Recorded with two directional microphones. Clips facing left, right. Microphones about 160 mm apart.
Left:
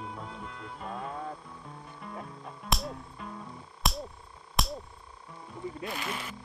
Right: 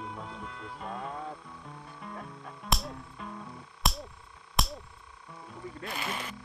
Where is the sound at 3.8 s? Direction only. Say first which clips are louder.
Left 1 dB; centre (ahead or behind).